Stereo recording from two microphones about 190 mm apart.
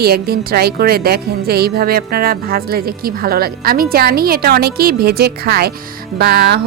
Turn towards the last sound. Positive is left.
turn(degrees=-55)  # may be behind; listen again after turning